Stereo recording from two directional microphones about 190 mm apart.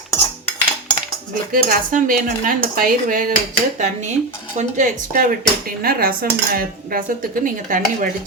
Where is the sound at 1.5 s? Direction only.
45° right (ahead or behind).